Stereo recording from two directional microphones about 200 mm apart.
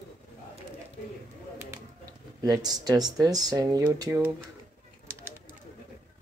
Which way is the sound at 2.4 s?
20° right (ahead or behind).